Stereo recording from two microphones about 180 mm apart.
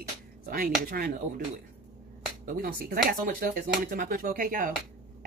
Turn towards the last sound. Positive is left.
turn(degrees=-50)  # may be behind; listen again after turning